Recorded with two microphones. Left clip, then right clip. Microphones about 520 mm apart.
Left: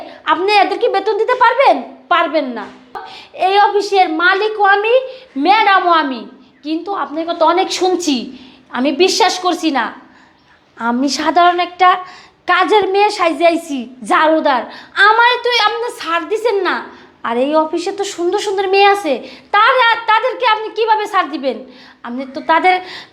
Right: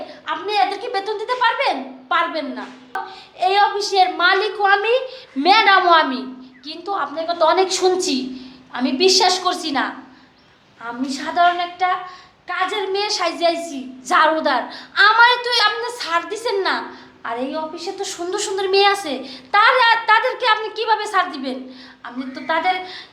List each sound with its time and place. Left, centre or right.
0.5 s a woman's voice: left
3.1 s a woman's voice: left; by 6.2 s centre
6.7 s a woman's voice: left
8.7 s a woman's voice: left
10.8 s a woman's voice: left
14.2 s a woman's voice: left
17.2 s a woman's voice: left
18.1 s a woman's voice: left
22.0 s a woman's voice: left